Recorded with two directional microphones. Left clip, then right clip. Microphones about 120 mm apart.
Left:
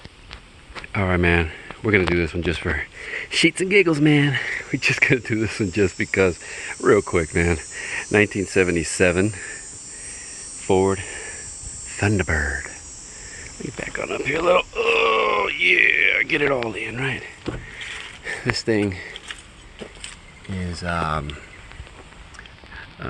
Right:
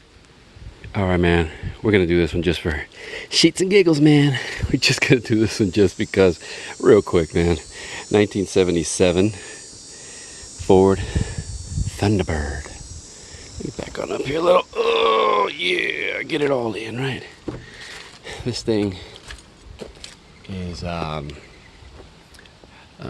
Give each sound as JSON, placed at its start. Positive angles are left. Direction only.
{"t": 0.9, "sound": "speech", "side_deg": -35}
{"t": 6.4, "sound": "speech", "side_deg": -75}
{"t": 7.1, "sound": "speech", "side_deg": -50}
{"t": 10.8, "sound": "cricket", "side_deg": -90}
{"t": 11.9, "sound": "speech", "side_deg": -40}
{"t": 13.7, "sound": "a sound", "side_deg": -35}
{"t": 16.6, "sound": "speech", "side_deg": -65}
{"t": 18.3, "sound": "speech", "side_deg": -20}
{"t": 20.5, "sound": "speech", "side_deg": 0}